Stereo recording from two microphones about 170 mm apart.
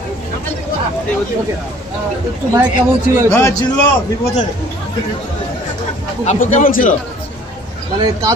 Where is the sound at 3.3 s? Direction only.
15° left (ahead or behind).